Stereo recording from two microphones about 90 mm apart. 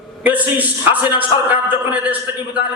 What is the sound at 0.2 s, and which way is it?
Speech, 15° right (ahead or behind).